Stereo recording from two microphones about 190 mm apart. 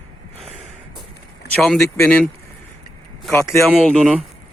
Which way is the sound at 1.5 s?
Centre (ahead or behind).